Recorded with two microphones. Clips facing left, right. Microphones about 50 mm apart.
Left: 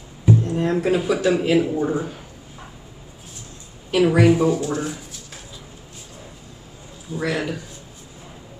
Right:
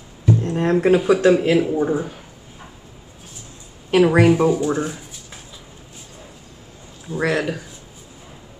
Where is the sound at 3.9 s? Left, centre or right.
Right.